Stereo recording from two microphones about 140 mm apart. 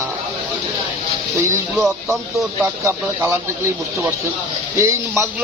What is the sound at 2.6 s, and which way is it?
Speech, 15° right (ahead or behind).